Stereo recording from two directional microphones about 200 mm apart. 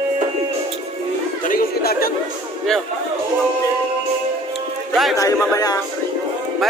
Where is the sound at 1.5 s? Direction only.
50° left (ahead or behind).